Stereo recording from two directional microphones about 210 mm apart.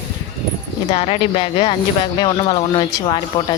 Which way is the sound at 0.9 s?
25° left (ahead or behind).